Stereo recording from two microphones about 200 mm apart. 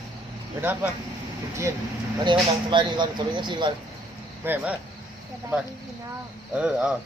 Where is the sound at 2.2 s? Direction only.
25° right (ahead or behind).